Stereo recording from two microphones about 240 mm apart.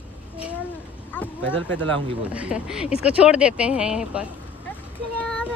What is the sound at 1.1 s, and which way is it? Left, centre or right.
Speech, centre.